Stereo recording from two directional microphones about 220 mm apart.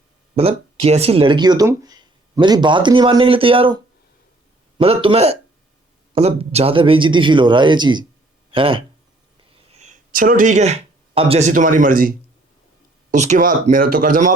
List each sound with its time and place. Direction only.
0.3 s speech: 25° right (ahead or behind)
4.8 s speech: 25° right (ahead or behind)
13.1 s speech: 35° right (ahead or behind)